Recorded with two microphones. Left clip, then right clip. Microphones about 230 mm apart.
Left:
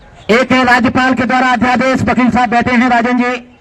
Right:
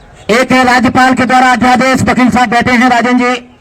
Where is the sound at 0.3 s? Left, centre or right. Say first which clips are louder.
Right 2 dB; right.